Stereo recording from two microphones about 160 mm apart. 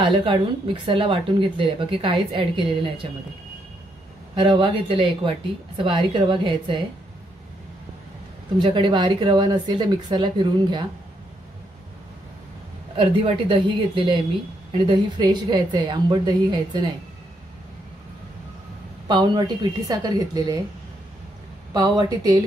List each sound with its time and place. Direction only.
0.0 s speech: 30° right (ahead or behind)
4.4 s speech: 35° right (ahead or behind)
8.5 s speech: 30° right (ahead or behind)
12.9 s speech: 35° right (ahead or behind)
19.0 s speech: 25° right (ahead or behind)
21.7 s speech: 25° right (ahead or behind)